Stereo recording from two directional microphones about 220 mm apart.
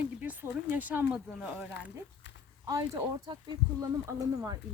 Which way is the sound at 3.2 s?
20° right (ahead or behind).